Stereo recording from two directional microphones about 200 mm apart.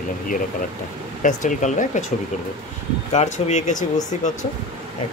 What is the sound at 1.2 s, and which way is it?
Speech, 40° left (ahead or behind).